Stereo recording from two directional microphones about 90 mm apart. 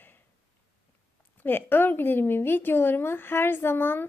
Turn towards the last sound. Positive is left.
turn(degrees=25)  # may be behind; listen again after turning